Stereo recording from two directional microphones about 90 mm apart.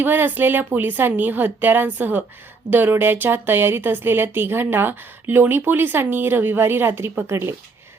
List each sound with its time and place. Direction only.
0.0 s a woman's voice: 20° right (ahead or behind)